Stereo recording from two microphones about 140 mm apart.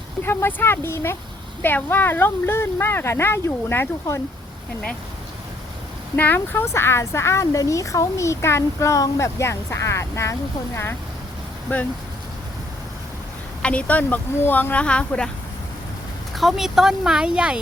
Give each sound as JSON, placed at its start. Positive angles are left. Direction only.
{"t": 0.3, "sound": "speech", "side_deg": 15}
{"t": 6.1, "sound": "speech", "side_deg": 15}
{"t": 11.7, "sound": "speech", "side_deg": 15}
{"t": 13.6, "sound": "speech", "side_deg": 10}
{"t": 16.3, "sound": "speech", "side_deg": 0}